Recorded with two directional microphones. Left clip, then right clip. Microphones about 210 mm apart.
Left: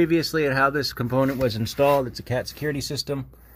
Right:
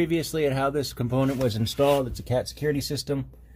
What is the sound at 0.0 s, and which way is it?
Speech, 45° left (ahead or behind).